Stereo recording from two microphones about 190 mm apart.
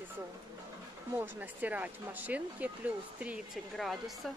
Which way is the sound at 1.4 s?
10° right (ahead or behind).